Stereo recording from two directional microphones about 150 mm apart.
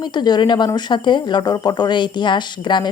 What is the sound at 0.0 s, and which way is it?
A woman's voice, 30° left (ahead or behind).